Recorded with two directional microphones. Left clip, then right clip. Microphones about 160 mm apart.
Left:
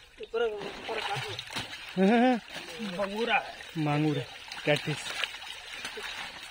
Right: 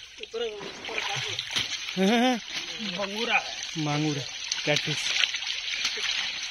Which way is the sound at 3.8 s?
Centre (ahead or behind).